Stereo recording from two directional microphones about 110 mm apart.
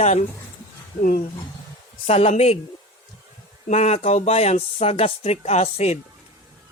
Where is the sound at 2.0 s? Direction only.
70° left (ahead or behind).